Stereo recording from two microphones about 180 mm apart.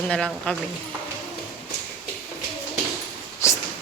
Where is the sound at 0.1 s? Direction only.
5° left (ahead or behind).